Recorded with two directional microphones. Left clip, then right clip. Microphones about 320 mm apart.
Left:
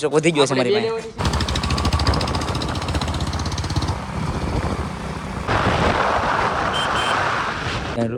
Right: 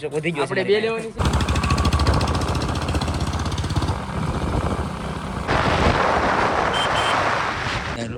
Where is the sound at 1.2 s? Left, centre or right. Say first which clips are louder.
Even; centre.